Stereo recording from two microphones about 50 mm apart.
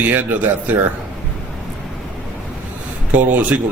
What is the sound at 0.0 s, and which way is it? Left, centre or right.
Speech, right.